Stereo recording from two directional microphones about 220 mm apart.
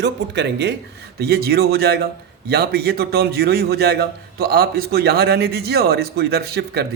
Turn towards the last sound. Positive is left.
turn(degrees=-45)  # may be behind; listen again after turning